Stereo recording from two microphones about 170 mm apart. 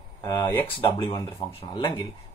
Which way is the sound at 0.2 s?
25° left (ahead or behind).